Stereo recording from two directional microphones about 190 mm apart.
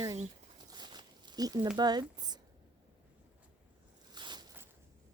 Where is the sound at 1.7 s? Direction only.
20° right (ahead or behind).